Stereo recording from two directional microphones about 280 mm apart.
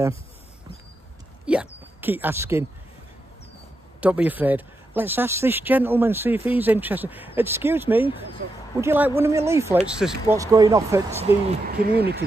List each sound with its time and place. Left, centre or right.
1.4 s speech: centre
4.0 s speech: centre
11.4 s speech: right